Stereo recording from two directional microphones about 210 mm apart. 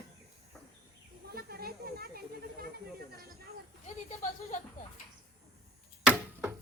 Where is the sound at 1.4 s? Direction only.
45° right (ahead or behind).